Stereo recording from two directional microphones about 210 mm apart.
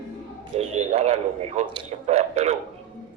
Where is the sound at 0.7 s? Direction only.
30° right (ahead or behind).